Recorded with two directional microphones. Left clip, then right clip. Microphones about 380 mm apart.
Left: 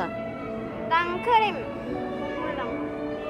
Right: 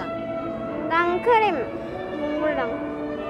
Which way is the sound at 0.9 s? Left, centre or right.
Right.